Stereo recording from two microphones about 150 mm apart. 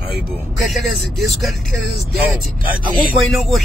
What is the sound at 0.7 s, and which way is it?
Speech, centre (ahead or behind).